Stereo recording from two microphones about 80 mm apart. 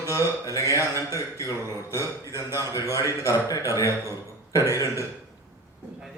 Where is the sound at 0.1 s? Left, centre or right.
Left.